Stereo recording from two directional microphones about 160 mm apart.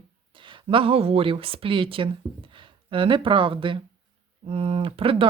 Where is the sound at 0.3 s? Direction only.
30° right (ahead or behind).